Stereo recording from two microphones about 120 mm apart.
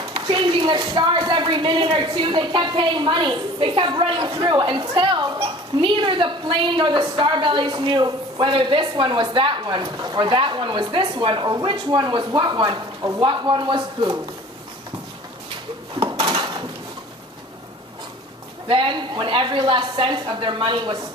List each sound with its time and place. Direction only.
0.1 s a sound: 40° right (ahead or behind)
0.8 s a woman's voice: 40° right (ahead or behind)
13.2 s a woman's voice: 40° right (ahead or behind)
16.2 s dishes: 35° right (ahead or behind)
18.7 s a woman's voice: 45° right (ahead or behind)